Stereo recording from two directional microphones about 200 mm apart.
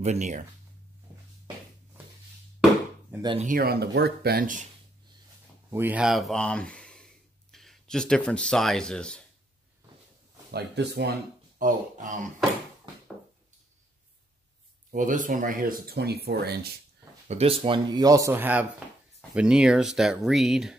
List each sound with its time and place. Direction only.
0.0 s speech: 35° right (ahead or behind)
3.2 s speech: 25° right (ahead or behind)
3.4 s speech: 50° right (ahead or behind)
5.7 s speech: 10° right (ahead or behind)
10.5 s speech: 55° right (ahead or behind); by 12.3 s 40° right (ahead or behind)
14.9 s speech: 40° right (ahead or behind)
17.3 s speech: 30° right (ahead or behind); by 20.7 s centre (ahead or behind)